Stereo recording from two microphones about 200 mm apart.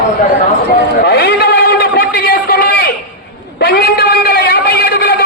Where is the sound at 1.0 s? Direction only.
50° left (ahead or behind).